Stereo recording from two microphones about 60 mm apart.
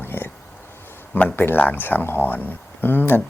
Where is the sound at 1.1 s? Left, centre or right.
Left.